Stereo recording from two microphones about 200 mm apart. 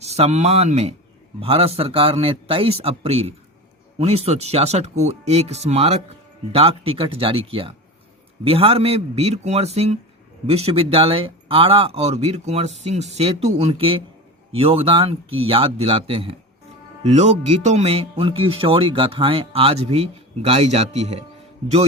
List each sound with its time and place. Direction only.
0.0 s speech: 30° right (ahead or behind)